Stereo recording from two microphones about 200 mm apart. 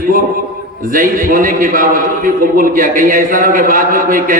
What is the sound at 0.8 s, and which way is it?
A man's voice, 45° right (ahead or behind).